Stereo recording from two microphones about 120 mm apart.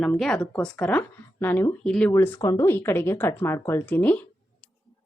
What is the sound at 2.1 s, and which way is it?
Speech, 20° left (ahead or behind).